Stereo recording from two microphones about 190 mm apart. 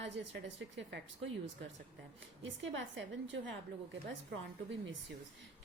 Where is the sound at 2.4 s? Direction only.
75° right (ahead or behind).